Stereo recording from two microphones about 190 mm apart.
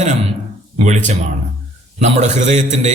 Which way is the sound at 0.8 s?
40° right (ahead or behind).